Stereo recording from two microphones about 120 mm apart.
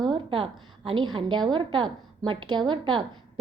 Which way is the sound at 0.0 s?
45° right (ahead or behind).